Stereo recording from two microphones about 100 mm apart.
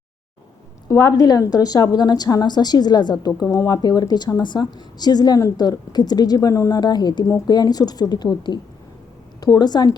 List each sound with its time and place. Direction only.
0.9 s a woman's voice: 30° left (ahead or behind)
3.4 s a woman's voice: 30° left (ahead or behind)